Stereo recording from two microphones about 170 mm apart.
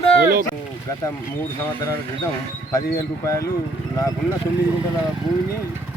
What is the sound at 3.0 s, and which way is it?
Speech, 20° left (ahead or behind).